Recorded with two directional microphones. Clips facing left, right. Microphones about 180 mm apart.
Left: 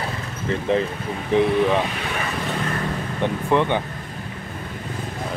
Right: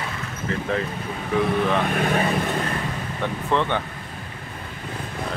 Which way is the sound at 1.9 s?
50° right (ahead or behind).